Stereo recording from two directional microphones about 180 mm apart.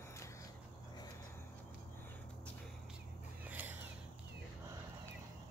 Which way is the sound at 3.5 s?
10° right (ahead or behind).